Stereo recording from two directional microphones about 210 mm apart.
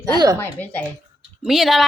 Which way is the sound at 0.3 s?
10° left (ahead or behind).